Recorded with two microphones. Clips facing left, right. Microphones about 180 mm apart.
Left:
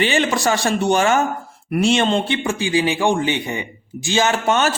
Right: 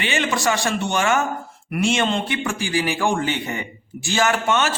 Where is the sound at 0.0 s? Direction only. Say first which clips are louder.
Left 4 dB; 35° left (ahead or behind).